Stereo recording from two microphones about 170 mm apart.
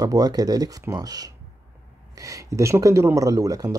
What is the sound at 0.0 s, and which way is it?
Speech, 25° right (ahead or behind).